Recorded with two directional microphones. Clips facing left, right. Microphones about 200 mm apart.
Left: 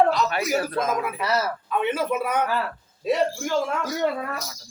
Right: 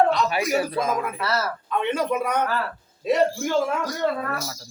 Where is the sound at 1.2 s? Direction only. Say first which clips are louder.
Left 1 dB; 15° left (ahead or behind).